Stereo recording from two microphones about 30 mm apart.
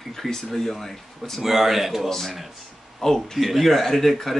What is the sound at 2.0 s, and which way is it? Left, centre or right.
Speech, centre.